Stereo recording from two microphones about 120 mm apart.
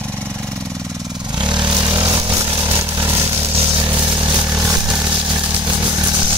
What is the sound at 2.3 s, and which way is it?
Chainsaw, 25° right (ahead or behind).